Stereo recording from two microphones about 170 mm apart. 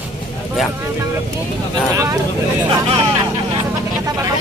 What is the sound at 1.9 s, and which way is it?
Speech, 20° right (ahead or behind).